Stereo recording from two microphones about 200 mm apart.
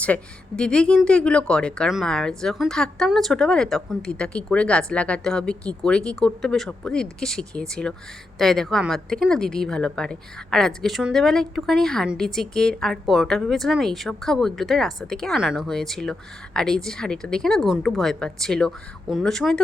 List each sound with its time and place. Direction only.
0.0 s speech: 5° left (ahead or behind)